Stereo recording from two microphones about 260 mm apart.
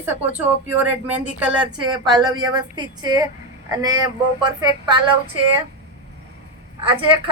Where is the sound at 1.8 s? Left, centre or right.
Centre.